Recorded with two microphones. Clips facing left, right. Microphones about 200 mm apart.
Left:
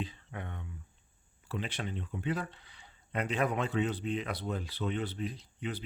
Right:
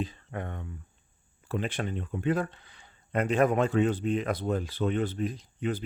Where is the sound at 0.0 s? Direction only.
45° right (ahead or behind).